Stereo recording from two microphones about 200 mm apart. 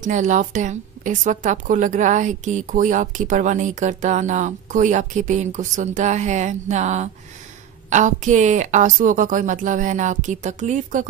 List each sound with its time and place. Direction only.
0.0 s a woman's voice: 40° right (ahead or behind)